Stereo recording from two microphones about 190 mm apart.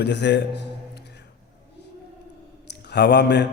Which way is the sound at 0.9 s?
65° left (ahead or behind).